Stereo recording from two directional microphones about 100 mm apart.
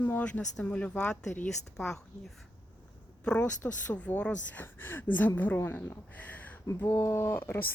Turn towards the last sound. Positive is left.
turn(degrees=25)  # may be behind; listen again after turning